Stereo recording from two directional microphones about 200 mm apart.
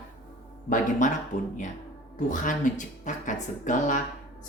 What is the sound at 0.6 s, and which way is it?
Speech, 40° left (ahead or behind).